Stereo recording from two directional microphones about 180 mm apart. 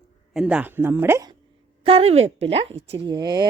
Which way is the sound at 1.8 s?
30° right (ahead or behind).